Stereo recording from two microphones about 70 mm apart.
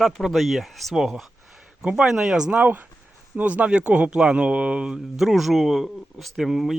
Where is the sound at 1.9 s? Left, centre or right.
Centre.